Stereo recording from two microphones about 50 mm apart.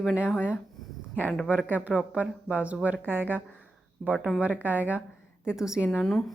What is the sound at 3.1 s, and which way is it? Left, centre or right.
Speech, right.